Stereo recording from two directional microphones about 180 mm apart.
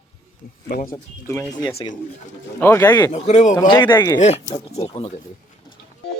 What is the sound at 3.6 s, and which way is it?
Speech, 25° left (ahead or behind).